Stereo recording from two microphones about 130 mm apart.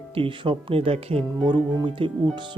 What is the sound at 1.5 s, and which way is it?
Speech, 35° right (ahead or behind).